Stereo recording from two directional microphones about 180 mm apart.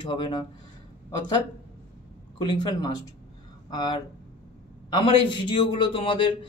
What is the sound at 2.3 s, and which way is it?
Speech, 25° left (ahead or behind).